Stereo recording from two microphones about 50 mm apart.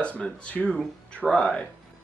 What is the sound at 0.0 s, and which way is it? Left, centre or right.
Speech, left.